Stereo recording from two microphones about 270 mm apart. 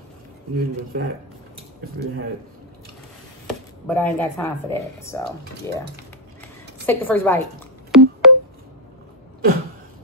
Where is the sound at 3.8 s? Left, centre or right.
Centre.